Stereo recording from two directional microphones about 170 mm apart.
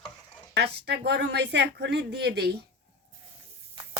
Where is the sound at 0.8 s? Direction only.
80° right.